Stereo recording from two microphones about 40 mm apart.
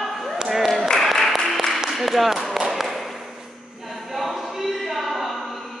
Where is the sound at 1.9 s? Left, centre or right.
Centre.